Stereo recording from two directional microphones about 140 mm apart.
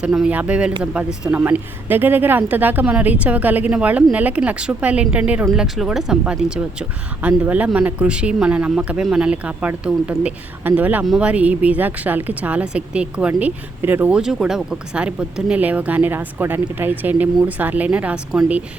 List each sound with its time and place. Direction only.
0.0 s speech: 5° right (ahead or behind)